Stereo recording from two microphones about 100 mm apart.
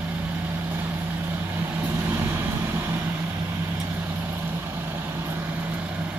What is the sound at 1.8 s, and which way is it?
Vehicle, 20° right (ahead or behind).